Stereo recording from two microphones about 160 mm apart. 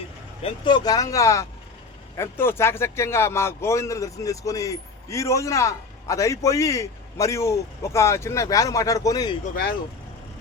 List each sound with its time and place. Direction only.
0.4 s a man's voice: 30° left (ahead or behind)